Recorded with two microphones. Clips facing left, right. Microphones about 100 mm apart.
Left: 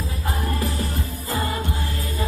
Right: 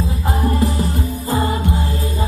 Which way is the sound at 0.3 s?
25° right (ahead or behind).